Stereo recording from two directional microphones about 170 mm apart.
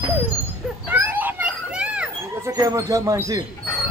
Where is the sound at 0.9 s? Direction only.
10° right (ahead or behind).